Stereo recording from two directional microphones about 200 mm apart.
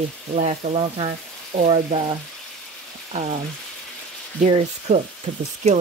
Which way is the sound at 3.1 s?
35° right (ahead or behind).